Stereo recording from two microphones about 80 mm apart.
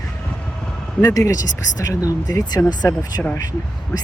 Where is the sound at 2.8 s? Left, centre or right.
Left.